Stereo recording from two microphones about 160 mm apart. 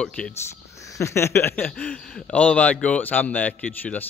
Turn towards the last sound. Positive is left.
turn(degrees=10)  # may be behind; listen again after turning